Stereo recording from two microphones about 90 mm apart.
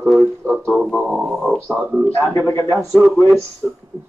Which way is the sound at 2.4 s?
30° left (ahead or behind).